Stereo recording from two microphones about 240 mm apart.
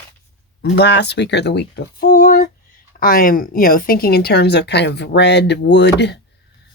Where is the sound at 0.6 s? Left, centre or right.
Left.